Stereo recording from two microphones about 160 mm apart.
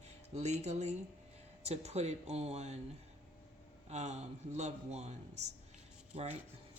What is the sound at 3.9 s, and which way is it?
Speech, 45° right (ahead or behind).